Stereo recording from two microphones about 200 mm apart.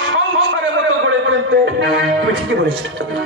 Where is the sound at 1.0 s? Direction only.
65° right (ahead or behind).